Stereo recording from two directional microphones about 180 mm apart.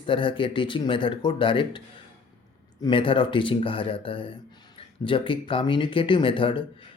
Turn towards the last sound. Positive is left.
turn(degrees=30)  # may be behind; listen again after turning